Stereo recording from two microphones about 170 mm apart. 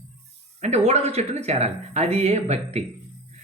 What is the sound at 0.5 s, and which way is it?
Speech, 40° right (ahead or behind).